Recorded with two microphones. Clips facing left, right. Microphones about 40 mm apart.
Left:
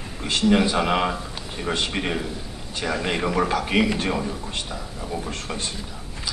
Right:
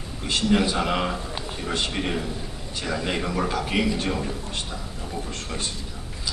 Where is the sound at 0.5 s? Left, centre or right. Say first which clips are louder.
Left 3 dB; centre.